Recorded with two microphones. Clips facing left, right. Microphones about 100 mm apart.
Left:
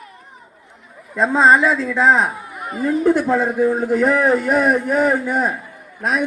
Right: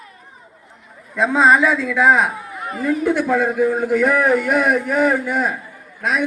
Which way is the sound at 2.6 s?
10° left (ahead or behind).